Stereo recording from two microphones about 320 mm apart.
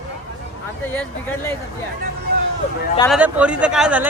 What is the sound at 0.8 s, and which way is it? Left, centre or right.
Speech, centre.